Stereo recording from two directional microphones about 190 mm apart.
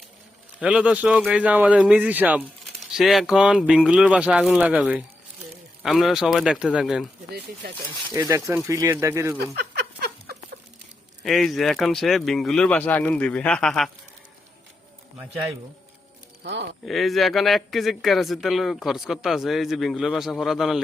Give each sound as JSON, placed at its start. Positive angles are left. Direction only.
{"t": 0.6, "sound": "a man's voice", "side_deg": -5}
{"t": 8.1, "sound": "a man's voice", "side_deg": -15}
{"t": 9.4, "sound": "a sound", "side_deg": -55}
{"t": 11.2, "sound": "speech", "side_deg": 0}
{"t": 16.4, "sound": "speech", "side_deg": -65}
{"t": 16.8, "sound": "speech", "side_deg": 0}